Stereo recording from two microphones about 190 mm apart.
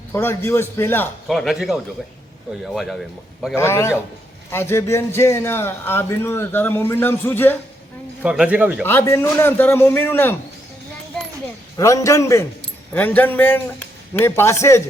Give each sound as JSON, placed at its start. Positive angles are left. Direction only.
{"t": 0.1, "sound": "speech", "side_deg": 10}
{"t": 1.3, "sound": "speech", "side_deg": 0}
{"t": 3.5, "sound": "speech", "side_deg": 15}
{"t": 8.2, "sound": "speech", "side_deg": -5}
{"t": 8.8, "sound": "speech", "side_deg": 10}
{"t": 11.8, "sound": "speech", "side_deg": 15}